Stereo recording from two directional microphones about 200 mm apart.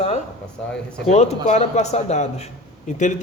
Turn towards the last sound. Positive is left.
turn(degrees=40)  # may be behind; listen again after turning